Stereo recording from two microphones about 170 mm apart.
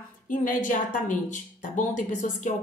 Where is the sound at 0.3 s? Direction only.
50° left (ahead or behind).